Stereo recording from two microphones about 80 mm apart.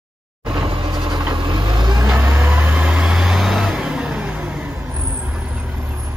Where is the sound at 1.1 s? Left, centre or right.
Right.